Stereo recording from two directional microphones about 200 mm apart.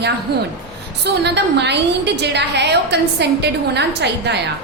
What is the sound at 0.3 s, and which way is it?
A woman's voice, 55° right (ahead or behind).